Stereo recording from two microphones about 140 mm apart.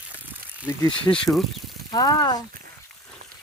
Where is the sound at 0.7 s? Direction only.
20° left (ahead or behind).